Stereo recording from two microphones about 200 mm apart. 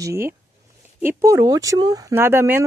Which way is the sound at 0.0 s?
15° right (ahead or behind).